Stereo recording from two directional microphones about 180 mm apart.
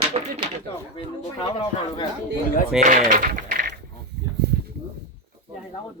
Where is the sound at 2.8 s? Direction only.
45° right (ahead or behind).